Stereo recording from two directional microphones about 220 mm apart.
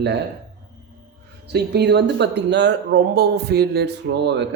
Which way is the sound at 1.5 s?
50° right (ahead or behind).